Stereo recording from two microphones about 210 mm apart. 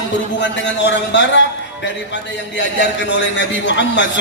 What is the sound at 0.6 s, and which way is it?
Speech, 55° left (ahead or behind).